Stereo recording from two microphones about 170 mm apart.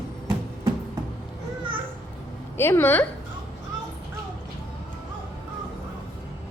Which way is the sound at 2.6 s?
15° left (ahead or behind).